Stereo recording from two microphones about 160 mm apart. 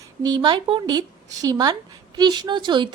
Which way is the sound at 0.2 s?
25° right (ahead or behind).